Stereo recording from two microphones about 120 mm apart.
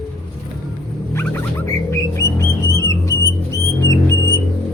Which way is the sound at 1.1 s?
20° left (ahead or behind).